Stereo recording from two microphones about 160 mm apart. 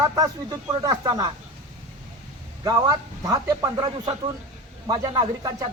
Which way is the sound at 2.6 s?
20° right (ahead or behind).